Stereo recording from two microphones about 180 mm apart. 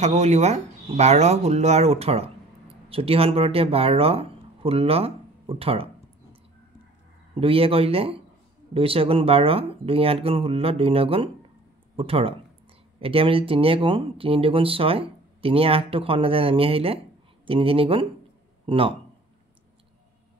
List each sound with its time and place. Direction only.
0.0 s speech: 40° right (ahead or behind)
7.3 s a man's voice: 30° right (ahead or behind)